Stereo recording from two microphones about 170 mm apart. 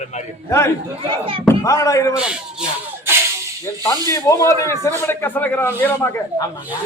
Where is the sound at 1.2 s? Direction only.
30° right (ahead or behind).